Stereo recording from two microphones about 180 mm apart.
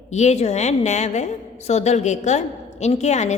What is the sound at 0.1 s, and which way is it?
A woman's voice, 40° left (ahead or behind).